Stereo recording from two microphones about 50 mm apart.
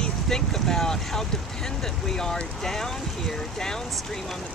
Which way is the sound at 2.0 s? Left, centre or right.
Centre.